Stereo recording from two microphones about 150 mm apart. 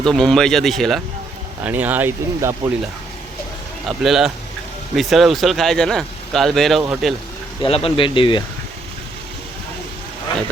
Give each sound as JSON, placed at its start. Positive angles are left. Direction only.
{"t": 0.0, "sound": "speech", "side_deg": 5}
{"t": 1.6, "sound": "speech", "side_deg": -10}
{"t": 3.8, "sound": "speech", "side_deg": 0}
{"t": 7.6, "sound": "speech", "side_deg": 40}